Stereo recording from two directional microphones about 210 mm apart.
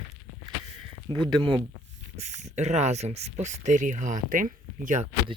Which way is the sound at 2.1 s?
35° right (ahead or behind).